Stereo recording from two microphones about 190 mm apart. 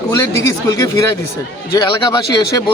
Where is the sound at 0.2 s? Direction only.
15° left (ahead or behind).